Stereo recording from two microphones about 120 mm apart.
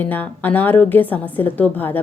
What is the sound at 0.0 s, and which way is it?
A woman's voice, 15° left (ahead or behind).